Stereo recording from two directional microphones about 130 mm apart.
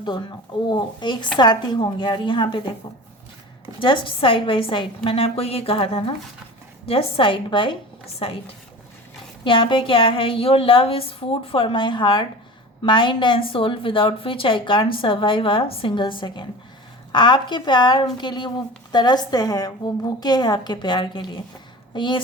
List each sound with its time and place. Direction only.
0.7 s speech: 35° left (ahead or behind)
3.8 s a woman's voice: 40° left (ahead or behind)
9.4 s a woman's voice: 40° left (ahead or behind)